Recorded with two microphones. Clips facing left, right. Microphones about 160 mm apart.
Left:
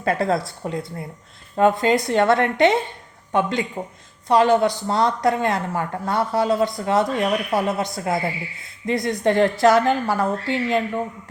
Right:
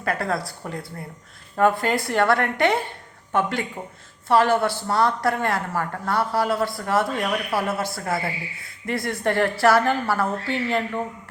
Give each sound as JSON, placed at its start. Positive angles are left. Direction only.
{"t": 0.0, "sound": "a woman's voice", "side_deg": 25}